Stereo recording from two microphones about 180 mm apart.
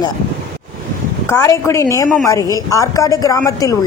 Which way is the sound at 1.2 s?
15° left (ahead or behind).